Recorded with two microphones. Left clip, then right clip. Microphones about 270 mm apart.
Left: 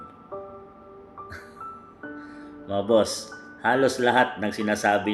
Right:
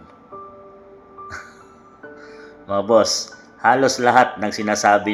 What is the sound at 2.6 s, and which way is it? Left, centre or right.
Speech, centre.